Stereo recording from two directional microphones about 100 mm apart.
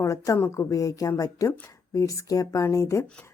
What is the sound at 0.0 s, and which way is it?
Speech, 30° left (ahead or behind).